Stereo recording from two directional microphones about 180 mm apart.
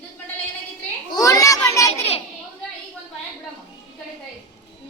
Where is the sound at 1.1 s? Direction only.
20° left (ahead or behind).